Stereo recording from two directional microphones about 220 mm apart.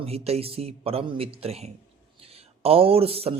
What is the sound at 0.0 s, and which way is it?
Speech, 25° right (ahead or behind).